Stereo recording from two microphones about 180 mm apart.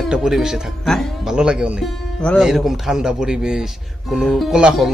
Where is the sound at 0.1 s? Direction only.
5° right (ahead or behind).